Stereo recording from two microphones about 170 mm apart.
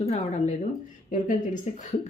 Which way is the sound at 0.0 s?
40° left (ahead or behind).